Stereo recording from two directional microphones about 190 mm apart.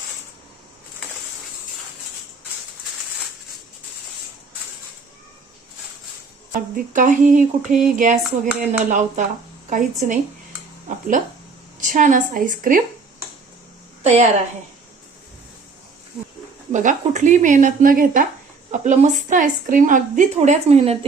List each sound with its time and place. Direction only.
6.5 s speech: 45° right (ahead or behind)
8.2 s a sound: 5° right (ahead or behind)
8.8 s a woman's voice: 40° right (ahead or behind)
10.9 s speech: 45° right (ahead or behind)
14.0 s a woman's voice: 35° right (ahead or behind)
16.7 s a woman's voice: 40° right (ahead or behind)